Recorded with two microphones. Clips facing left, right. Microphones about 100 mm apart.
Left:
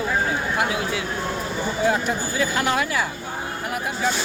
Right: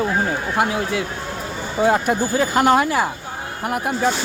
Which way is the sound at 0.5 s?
45° right (ahead or behind).